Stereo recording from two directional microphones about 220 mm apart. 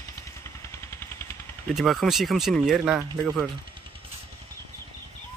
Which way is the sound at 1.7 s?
Centre (ahead or behind).